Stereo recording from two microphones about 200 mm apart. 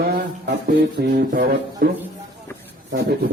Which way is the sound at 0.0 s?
55° right (ahead or behind).